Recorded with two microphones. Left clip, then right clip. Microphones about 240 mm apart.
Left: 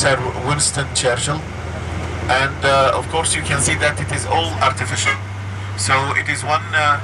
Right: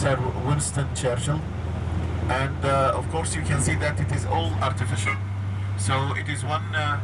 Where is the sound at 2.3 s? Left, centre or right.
Centre.